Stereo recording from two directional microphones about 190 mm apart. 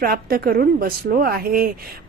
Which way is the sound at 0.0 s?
50° right (ahead or behind).